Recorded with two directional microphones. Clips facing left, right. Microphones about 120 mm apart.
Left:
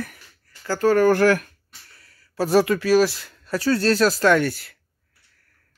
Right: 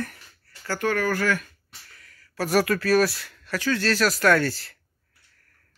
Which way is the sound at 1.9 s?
30° left (ahead or behind).